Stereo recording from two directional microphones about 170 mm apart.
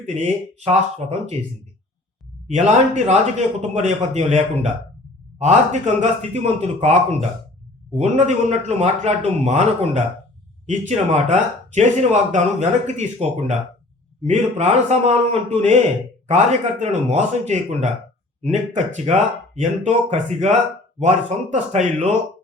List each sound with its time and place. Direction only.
1.0 s speech: 40° right (ahead or behind)
2.5 s a man's voice: 45° right (ahead or behind)